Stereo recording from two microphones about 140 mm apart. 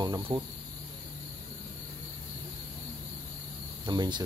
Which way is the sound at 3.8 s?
30° right (ahead or behind).